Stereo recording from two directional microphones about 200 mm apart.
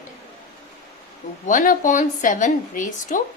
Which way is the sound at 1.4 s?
40° left (ahead or behind).